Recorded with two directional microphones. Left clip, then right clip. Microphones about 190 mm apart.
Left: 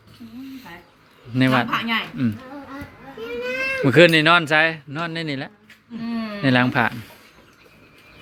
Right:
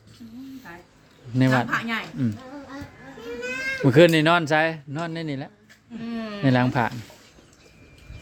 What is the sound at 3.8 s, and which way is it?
Speech, 20° right (ahead or behind).